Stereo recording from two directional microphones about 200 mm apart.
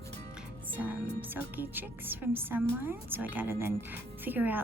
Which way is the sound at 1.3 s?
10° right (ahead or behind).